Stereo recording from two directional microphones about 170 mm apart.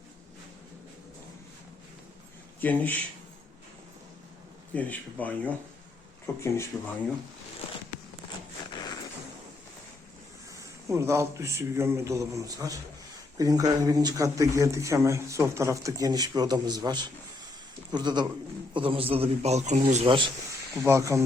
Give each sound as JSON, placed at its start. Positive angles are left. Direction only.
{"t": 2.6, "sound": "a man's voice", "side_deg": 10}
{"t": 4.7, "sound": "a man's voice", "side_deg": 10}
{"t": 8.7, "sound": "a sound", "side_deg": 25}
{"t": 10.8, "sound": "a man's voice", "side_deg": -15}
{"t": 20.7, "sound": "a man's voice", "side_deg": -15}